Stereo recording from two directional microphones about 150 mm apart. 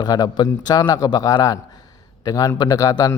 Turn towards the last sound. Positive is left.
turn(degrees=25)  # may be behind; listen again after turning